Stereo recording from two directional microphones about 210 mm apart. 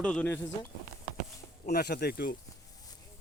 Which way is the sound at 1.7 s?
50° left (ahead or behind).